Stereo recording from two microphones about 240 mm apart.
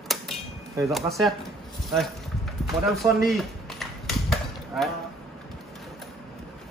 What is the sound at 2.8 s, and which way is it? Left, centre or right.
Chop, centre.